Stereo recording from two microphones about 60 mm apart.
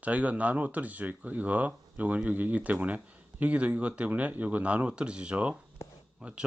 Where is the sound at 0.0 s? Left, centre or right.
Right.